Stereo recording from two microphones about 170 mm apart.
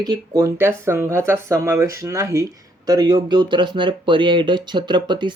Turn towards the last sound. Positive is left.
turn(degrees=-25)  # may be behind; listen again after turning